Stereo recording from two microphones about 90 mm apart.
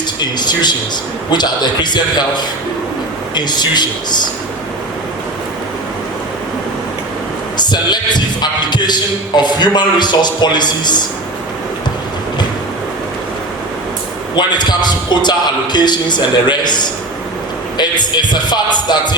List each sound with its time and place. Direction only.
0.2 s a man's voice: 55° left (ahead or behind)
7.5 s speech: 55° left (ahead or behind)
14.3 s speech: 55° left (ahead or behind)